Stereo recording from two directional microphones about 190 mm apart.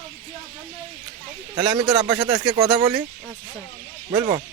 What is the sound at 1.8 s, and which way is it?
Speech, 15° right (ahead or behind).